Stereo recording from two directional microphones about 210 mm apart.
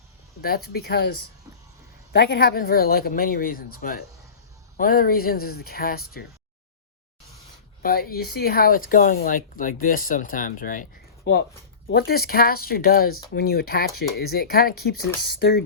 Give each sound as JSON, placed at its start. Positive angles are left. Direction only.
{"t": 0.4, "sound": "speech", "side_deg": 45}
{"t": 7.8, "sound": "speech", "side_deg": 45}